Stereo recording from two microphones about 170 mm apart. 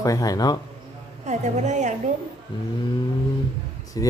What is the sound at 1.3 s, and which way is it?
Speech, 45° right (ahead or behind).